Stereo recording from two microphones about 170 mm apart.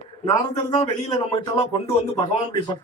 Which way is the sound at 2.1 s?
25° left (ahead or behind).